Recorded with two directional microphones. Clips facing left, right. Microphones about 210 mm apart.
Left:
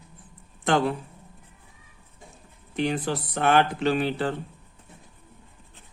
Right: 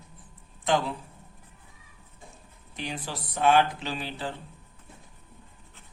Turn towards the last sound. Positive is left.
turn(degrees=60)  # may be behind; listen again after turning